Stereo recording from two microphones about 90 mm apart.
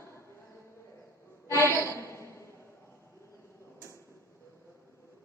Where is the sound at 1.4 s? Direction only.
30° left (ahead or behind).